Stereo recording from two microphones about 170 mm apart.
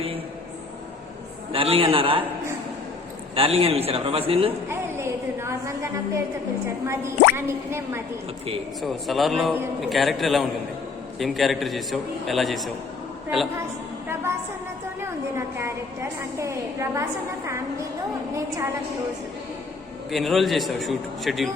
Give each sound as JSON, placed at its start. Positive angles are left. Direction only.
{"t": 1.5, "sound": "a man's voice", "side_deg": -30}
{"t": 3.3, "sound": "a man's voice", "side_deg": -35}
{"t": 4.7, "sound": "a sound", "side_deg": -15}
{"t": 6.8, "sound": "a woman's voice", "side_deg": -15}
{"t": 8.8, "sound": "a man's voice", "side_deg": 0}
{"t": 15.0, "sound": "a woman's voice", "side_deg": -15}
{"t": 18.3, "sound": "a woman's voice", "side_deg": -20}
{"t": 20.1, "sound": "a man's voice", "side_deg": 0}